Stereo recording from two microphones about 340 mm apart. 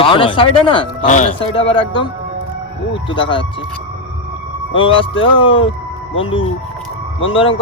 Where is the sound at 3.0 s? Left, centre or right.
Centre.